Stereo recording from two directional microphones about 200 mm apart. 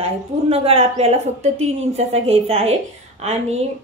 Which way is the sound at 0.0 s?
30° right (ahead or behind).